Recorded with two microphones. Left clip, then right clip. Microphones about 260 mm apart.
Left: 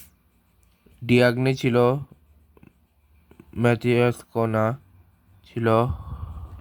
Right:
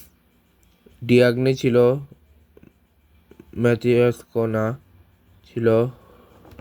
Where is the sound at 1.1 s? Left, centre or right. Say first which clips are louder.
Right 3 dB; centre.